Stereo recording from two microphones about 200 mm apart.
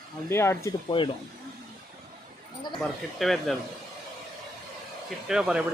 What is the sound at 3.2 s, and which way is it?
Speech, centre (ahead or behind).